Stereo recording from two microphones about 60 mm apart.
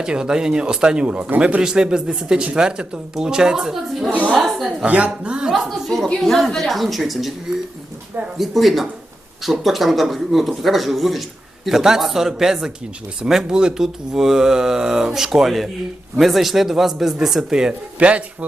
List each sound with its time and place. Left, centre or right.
0.0 s speech: centre
4.9 s speech: right
5.6 s speech: centre
8.4 s speech: centre; by 18.4 s right